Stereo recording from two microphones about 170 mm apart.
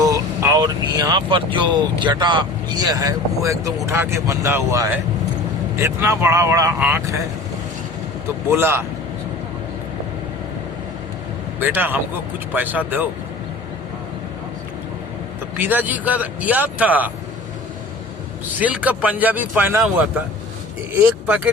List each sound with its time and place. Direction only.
0.0 s speech: 20° right (ahead or behind)
8.4 s speech: 15° right (ahead or behind)
11.6 s speech: 10° right (ahead or behind)
15.5 s speech: 10° right (ahead or behind)
18.6 s speech: 10° right (ahead or behind)